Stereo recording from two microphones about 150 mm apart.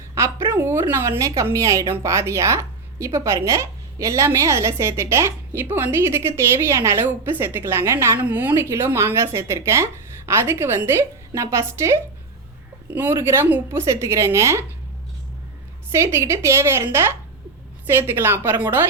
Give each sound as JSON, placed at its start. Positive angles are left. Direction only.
{"t": 0.1, "sound": "a woman's voice", "side_deg": -20}
{"t": 15.9, "sound": "a woman's voice", "side_deg": -20}